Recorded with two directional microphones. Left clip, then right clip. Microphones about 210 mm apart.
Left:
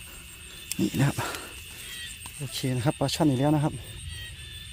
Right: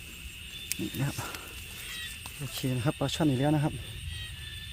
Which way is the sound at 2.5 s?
30° left (ahead or behind).